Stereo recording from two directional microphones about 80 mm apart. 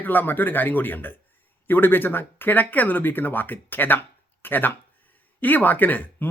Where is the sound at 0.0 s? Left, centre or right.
Left.